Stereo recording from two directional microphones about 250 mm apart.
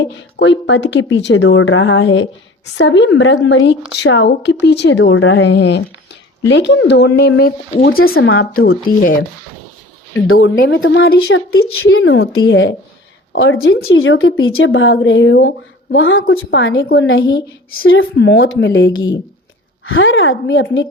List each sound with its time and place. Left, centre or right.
0.0 s speech: left
8.3 s speech: left
8.6 s speech: left
10.2 s speech: left